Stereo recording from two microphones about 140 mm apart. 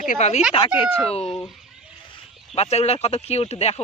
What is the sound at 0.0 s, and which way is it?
Speech, 60° left (ahead or behind).